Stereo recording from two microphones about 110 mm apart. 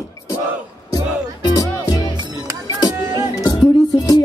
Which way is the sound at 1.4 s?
35° left (ahead or behind).